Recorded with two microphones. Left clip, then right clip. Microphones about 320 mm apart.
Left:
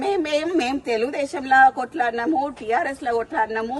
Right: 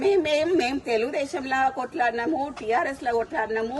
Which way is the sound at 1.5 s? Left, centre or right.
Left.